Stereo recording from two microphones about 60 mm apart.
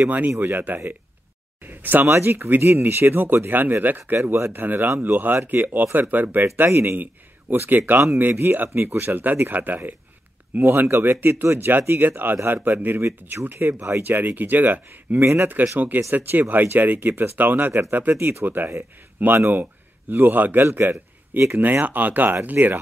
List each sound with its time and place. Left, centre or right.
0.3 s speech: right
1.6 s a sound: right
2.0 s speech: right
4.2 s speech: right
4.5 s speech: right
6.4 s a man's voice: right